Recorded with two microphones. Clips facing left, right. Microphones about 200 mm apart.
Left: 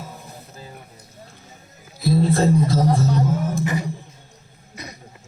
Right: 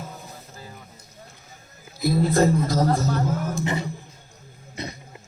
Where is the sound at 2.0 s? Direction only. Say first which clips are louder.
Left 1 dB; 30° left (ahead or behind).